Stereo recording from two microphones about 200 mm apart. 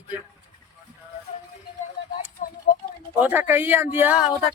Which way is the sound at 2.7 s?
45° left (ahead or behind).